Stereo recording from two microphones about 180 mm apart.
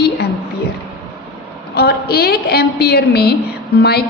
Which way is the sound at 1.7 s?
65° left (ahead or behind).